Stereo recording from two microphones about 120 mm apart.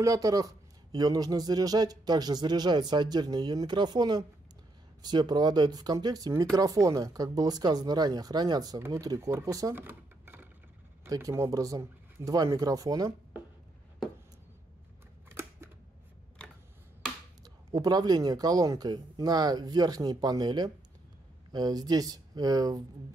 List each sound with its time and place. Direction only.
0.0 s speech: 30° right (ahead or behind)
9.8 s a sound: 15° right (ahead or behind)
11.1 s speech: 25° right (ahead or behind)
15.2 s scissors: 20° right (ahead or behind)
17.4 s speech: 30° right (ahead or behind)